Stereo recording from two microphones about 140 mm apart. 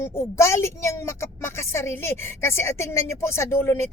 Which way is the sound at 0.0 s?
20° left (ahead or behind).